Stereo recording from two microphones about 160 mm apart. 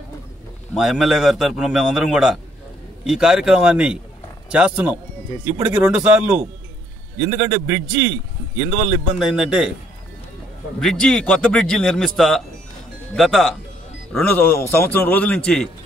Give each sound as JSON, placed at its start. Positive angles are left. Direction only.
{"t": 0.7, "sound": "a man's voice", "side_deg": -5}
{"t": 7.2, "sound": "a man's voice", "side_deg": -30}
{"t": 9.3, "sound": "a man's voice", "side_deg": -5}
{"t": 10.8, "sound": "a man's voice", "side_deg": 5}
{"t": 14.1, "sound": "speech", "side_deg": 10}